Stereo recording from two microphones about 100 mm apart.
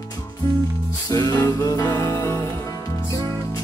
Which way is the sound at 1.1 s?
35° left (ahead or behind).